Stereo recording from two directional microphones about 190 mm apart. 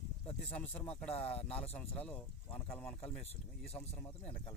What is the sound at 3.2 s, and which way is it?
Speech, 35° left (ahead or behind).